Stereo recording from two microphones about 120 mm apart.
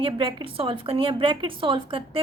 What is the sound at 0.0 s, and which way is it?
A woman's voice, 45° right (ahead or behind).